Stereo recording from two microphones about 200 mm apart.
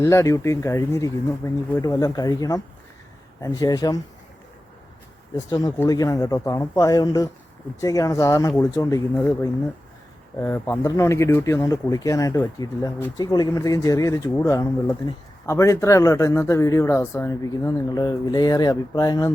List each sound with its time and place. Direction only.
0.0 s speech: 15° left (ahead or behind)
5.5 s speech: 15° left (ahead or behind)